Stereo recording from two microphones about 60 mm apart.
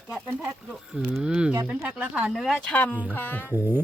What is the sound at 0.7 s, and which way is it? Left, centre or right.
Speech, centre.